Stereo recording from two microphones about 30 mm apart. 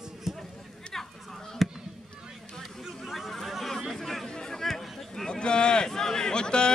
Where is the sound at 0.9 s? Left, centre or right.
Centre.